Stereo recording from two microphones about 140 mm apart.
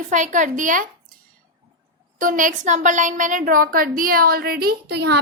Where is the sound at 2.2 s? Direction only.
70° right (ahead or behind); by 4.7 s 90° right.